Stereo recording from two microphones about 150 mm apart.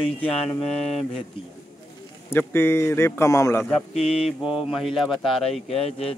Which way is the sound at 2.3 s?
15° left (ahead or behind).